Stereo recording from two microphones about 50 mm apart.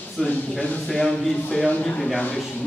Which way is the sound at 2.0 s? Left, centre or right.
Centre.